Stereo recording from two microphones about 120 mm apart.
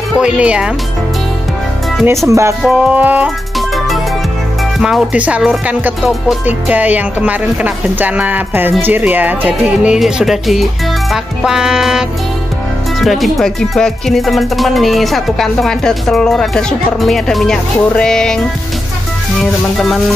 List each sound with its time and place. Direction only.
0.2 s speech: 10° right (ahead or behind)
2.0 s speech: 25° right (ahead or behind)
2.6 s speech: 10° right (ahead or behind)
3.5 s music: centre (ahead or behind)
5.7 s speech: 10° right (ahead or behind)
8.8 s music: 15° right (ahead or behind); by 18.4 s 5° left (ahead or behind)